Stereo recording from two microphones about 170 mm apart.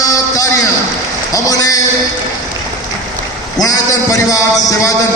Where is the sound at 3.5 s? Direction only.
20° left (ahead or behind).